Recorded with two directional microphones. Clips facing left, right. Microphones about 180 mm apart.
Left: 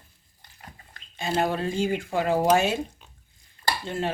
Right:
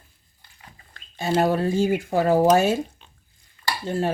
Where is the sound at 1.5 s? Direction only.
40° right (ahead or behind).